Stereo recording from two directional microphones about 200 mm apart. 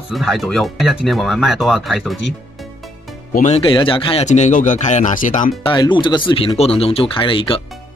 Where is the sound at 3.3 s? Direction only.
35° left (ahead or behind).